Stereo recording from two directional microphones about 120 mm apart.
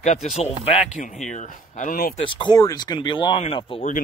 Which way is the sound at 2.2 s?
40° left (ahead or behind).